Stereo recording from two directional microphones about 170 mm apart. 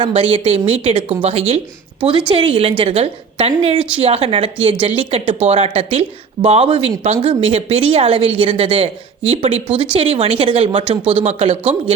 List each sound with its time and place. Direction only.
0.0 s speech: 30° right (ahead or behind)